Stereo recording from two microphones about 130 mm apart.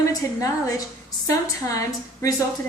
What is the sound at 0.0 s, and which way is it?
A woman's voice, 25° left (ahead or behind).